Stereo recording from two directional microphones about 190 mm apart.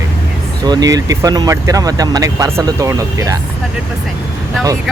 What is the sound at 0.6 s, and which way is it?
Speech, 20° right (ahead or behind).